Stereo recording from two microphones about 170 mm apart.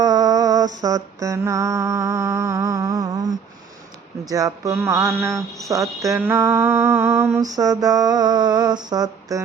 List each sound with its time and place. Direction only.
0.0 s mantra: 25° right (ahead or behind)
4.3 s mantra: 20° right (ahead or behind)